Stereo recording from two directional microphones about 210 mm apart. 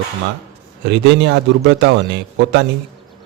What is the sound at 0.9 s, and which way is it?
A man's voice, 55° right (ahead or behind).